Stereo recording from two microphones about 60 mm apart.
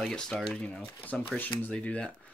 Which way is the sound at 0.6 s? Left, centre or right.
Left.